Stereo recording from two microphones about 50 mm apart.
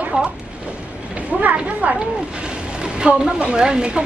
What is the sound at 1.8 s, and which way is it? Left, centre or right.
Speech, right.